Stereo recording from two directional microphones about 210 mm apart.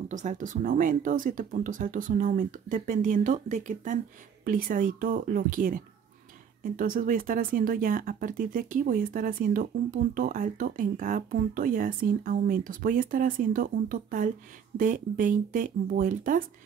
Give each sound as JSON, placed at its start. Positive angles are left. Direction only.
{"t": 0.1, "sound": "speech", "side_deg": -35}